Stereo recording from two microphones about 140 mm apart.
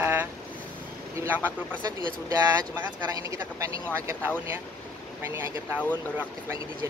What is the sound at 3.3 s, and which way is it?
Speech, 20° right (ahead or behind).